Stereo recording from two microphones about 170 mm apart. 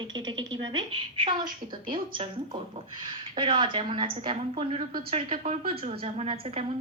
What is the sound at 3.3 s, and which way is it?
A woman's voice, 30° right (ahead or behind).